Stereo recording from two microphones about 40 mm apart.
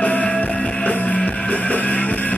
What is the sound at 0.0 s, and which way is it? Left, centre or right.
Music, left.